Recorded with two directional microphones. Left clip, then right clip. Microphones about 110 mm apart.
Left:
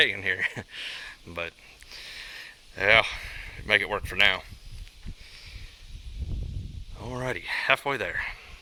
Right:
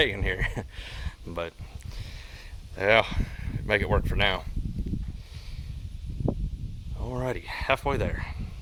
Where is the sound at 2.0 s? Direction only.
15° right (ahead or behind); by 4.5 s 30° right (ahead or behind).